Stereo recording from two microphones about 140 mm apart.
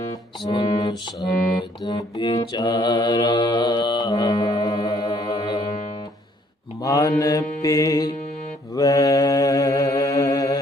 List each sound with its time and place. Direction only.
0.1 s music: 35° left (ahead or behind)
2.6 s mantra: 30° left (ahead or behind)
4.6 s music: 30° left (ahead or behind)
6.8 s mantra: 25° left (ahead or behind)